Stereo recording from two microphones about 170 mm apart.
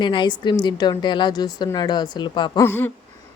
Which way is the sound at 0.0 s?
25° left (ahead or behind).